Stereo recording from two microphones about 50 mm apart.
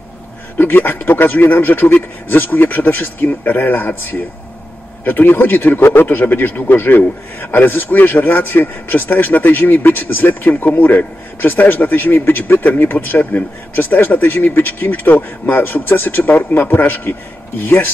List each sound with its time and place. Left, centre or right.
0.6 s a man's voice: left
5.8 s a man's voice: left